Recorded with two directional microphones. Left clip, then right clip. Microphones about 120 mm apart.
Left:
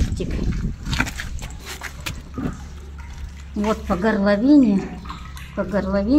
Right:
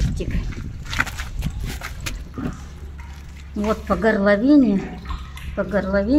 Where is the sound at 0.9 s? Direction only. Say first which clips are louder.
Right 1 dB; 15° right (ahead or behind).